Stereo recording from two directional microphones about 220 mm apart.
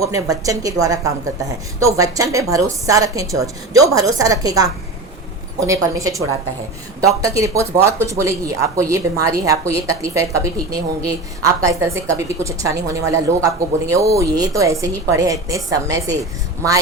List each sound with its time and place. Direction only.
0.0 s a woman's voice: 15° right (ahead or behind)